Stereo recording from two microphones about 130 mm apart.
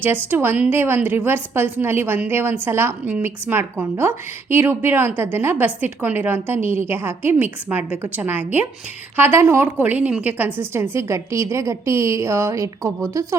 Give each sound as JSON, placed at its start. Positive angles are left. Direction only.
{"t": 0.0, "sound": "a woman's voice", "side_deg": -15}